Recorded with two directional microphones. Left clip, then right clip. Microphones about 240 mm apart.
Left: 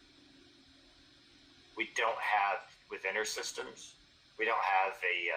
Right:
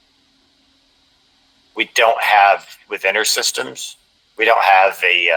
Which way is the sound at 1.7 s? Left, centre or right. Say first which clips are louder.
Right 19 dB; right.